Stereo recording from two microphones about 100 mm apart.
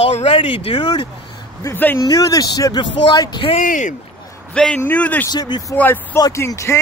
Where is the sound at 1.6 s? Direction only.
20° left (ahead or behind).